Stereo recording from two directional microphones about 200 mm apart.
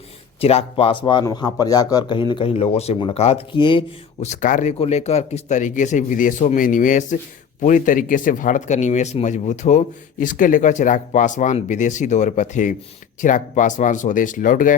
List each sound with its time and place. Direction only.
0.3 s a man's voice: 30° left (ahead or behind)